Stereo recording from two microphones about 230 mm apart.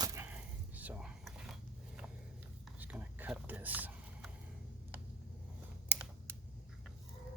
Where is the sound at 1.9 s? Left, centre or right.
Centre.